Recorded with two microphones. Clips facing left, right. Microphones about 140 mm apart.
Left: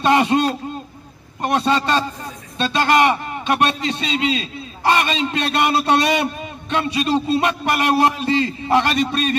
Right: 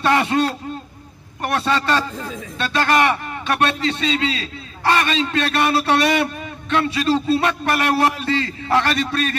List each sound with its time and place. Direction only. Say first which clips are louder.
0.0 s a man's voice: left 2 dB; 20° left (ahead or behind)